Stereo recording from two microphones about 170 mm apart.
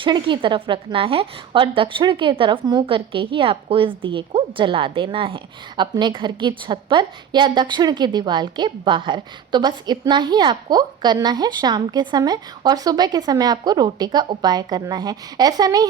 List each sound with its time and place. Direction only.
0.0 s a woman's voice: 30° right (ahead or behind)